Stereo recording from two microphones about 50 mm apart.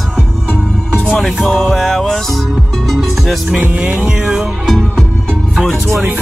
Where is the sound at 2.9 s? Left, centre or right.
Centre.